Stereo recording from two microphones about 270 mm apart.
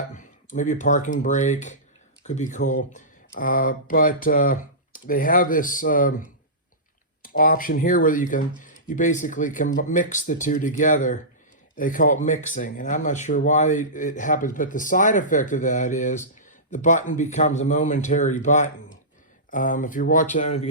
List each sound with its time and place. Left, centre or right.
0.2 s speech: left
7.2 s speech: left